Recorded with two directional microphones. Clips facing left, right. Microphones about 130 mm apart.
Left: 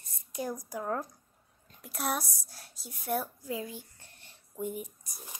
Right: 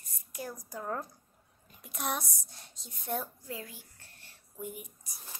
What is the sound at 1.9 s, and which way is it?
A woman's voice, 5° left (ahead or behind).